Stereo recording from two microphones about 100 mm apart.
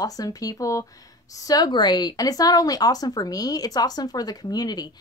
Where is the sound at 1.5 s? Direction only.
45° left (ahead or behind).